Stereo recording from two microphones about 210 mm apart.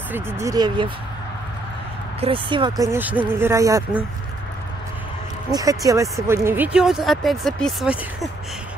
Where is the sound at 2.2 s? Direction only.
25° right (ahead or behind).